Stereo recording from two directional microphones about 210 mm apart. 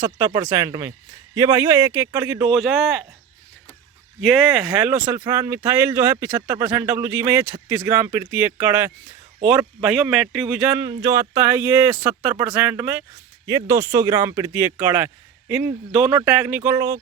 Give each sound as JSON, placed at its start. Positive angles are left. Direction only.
{"t": 0.0, "sound": "speech", "side_deg": -15}
{"t": 4.2, "sound": "speech", "side_deg": 0}